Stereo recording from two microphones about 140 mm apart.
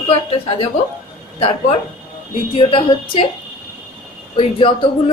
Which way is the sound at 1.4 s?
40° left (ahead or behind).